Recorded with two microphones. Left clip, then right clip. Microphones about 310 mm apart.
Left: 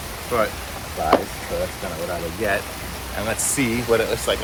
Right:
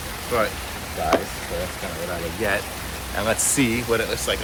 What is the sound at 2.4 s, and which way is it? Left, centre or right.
Speech, centre.